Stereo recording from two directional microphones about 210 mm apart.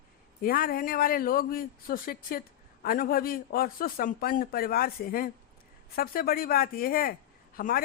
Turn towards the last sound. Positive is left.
turn(degrees=45)  # may be behind; listen again after turning